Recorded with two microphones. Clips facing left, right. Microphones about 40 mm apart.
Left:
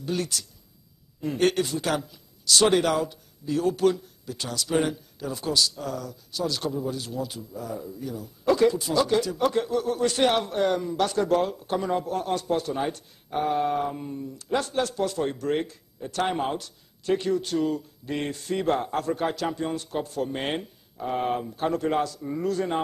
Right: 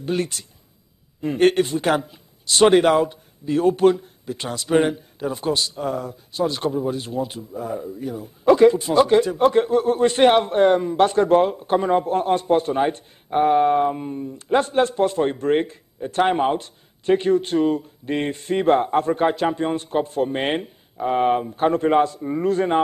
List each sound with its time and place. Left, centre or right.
0.0 s a man's voice: right